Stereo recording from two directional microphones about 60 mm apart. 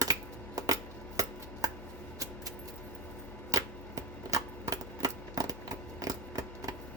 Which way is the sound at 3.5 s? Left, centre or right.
Right.